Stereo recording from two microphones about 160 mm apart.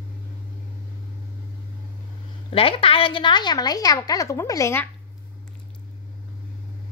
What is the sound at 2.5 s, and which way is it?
A woman's voice, 35° left (ahead or behind).